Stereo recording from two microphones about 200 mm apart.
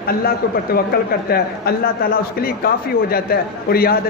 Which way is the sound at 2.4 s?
50° left (ahead or behind).